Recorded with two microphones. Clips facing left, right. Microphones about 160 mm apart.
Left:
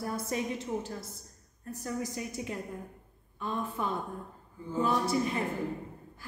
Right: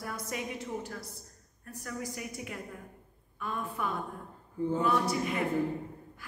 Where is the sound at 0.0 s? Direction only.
30° left (ahead or behind).